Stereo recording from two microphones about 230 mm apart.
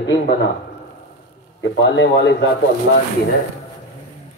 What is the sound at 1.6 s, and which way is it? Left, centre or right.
A man's voice, left.